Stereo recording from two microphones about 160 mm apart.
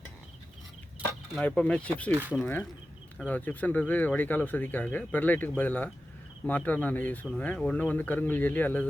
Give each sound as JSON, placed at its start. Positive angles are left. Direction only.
{"t": 1.4, "sound": "speech", "side_deg": 10}
{"t": 2.1, "sound": "speech", "side_deg": -10}
{"t": 2.4, "sound": "speech", "side_deg": 10}